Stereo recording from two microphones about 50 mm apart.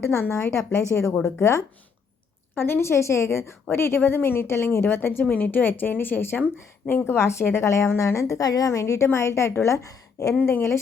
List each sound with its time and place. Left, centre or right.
0.0 s a woman's voice: left
2.6 s a woman's voice: left
5.2 s speech: left
7.0 s a woman's voice: left
7.9 s a woman's voice: left
9.1 s a woman's voice: left
10.4 s a woman's voice: left